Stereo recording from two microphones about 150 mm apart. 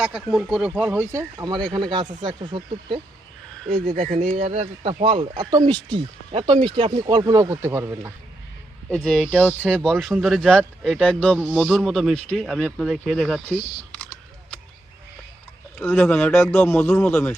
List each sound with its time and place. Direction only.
0.0 s speech: centre (ahead or behind); by 3.0 s 35° right (ahead or behind)
3.9 s speech: 50° right (ahead or behind); by 8.1 s 15° right (ahead or behind)
9.0 s speech: 5° left (ahead or behind)
15.8 s speech: 15° left (ahead or behind)